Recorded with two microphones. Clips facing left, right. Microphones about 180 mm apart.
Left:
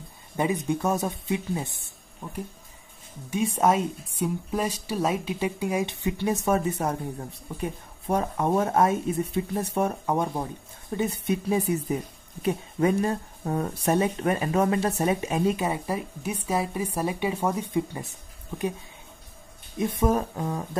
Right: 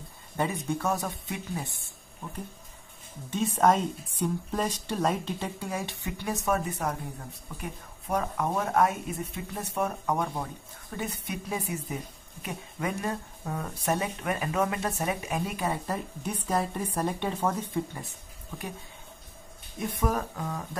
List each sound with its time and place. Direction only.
0.4 s speech: 15° left (ahead or behind)
19.8 s speech: 25° left (ahead or behind)